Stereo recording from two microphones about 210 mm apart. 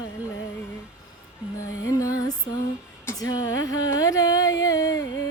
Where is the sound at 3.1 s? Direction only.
15° left (ahead or behind).